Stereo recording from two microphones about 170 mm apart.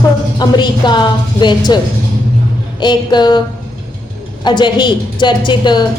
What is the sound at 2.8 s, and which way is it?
Speech, 25° left (ahead or behind).